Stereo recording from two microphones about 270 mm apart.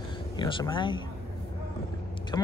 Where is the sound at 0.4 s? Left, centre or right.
Centre.